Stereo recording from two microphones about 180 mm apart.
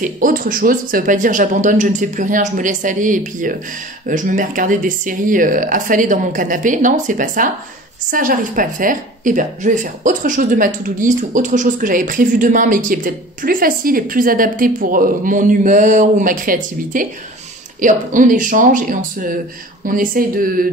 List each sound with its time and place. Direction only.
0.0 s speech: 50° right (ahead or behind)